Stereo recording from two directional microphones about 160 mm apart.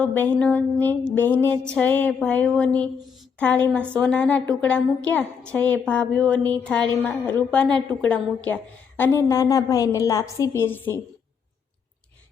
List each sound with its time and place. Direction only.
0.0 s a woman's voice: 10° left (ahead or behind)